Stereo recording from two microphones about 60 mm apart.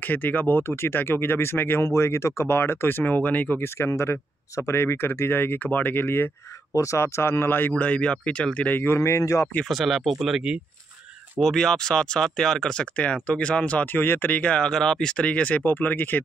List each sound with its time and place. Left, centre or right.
0.0 s speech: left
3.6 s speech: left
6.7 s speech: left
7.8 s speech: centre
8.8 s speech: left
9.7 s speech: centre
11.4 s speech: centre
12.9 s speech: left
13.9 s speech: left
15.6 s speech: left